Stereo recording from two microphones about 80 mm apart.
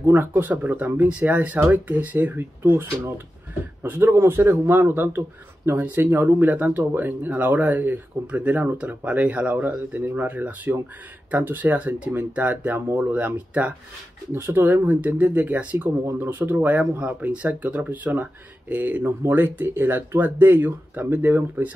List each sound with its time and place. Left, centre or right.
0.0 s speech: right
14.3 s speech: right